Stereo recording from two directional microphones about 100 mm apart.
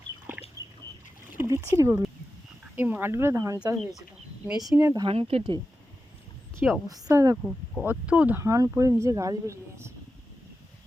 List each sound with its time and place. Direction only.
0.6 s a sound: 35° right (ahead or behind)
1.4 s speech: 25° right (ahead or behind)
4.4 s speech: 5° right (ahead or behind)
4.8 s speech: 30° right (ahead or behind)
5.0 s speech: 85° right
6.6 s speech: 10° right (ahead or behind)
7.1 s speech: 30° right (ahead or behind)
7.9 s speech: 10° right (ahead or behind)
8.4 s speech: 30° right (ahead or behind)